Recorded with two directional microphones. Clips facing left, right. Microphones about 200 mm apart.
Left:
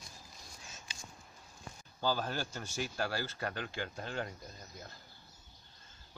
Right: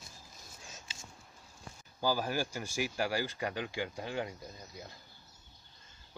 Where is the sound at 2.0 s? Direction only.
10° right (ahead or behind).